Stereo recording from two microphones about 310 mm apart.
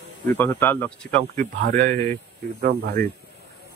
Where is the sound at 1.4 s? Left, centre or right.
Right.